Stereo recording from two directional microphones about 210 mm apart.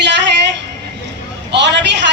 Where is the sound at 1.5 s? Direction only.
55° right (ahead or behind).